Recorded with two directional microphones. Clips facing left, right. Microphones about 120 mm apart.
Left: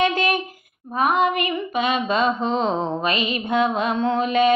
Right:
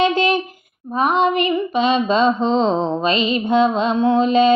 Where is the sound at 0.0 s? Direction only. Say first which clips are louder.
Right 4 dB; 25° right (ahead or behind).